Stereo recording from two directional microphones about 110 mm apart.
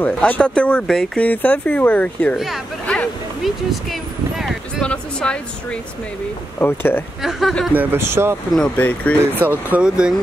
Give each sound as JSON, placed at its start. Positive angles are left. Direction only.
{"t": 0.0, "sound": "speech", "side_deg": 10}
{"t": 2.3, "sound": "speech", "side_deg": 0}
{"t": 3.4, "sound": "a sound", "side_deg": 0}
{"t": 4.8, "sound": "speech", "side_deg": 10}
{"t": 6.6, "sound": "speech", "side_deg": 20}
{"t": 7.2, "sound": "speech", "side_deg": 0}
{"t": 7.7, "sound": "speech", "side_deg": -20}
{"t": 8.5, "sound": "speech", "side_deg": 10}
{"t": 9.4, "sound": "speech", "side_deg": -15}